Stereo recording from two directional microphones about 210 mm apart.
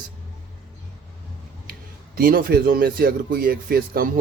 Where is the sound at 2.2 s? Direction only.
45° right (ahead or behind).